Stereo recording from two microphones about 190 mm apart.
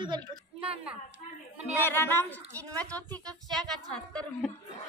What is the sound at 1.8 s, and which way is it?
A woman's voice, 10° left (ahead or behind).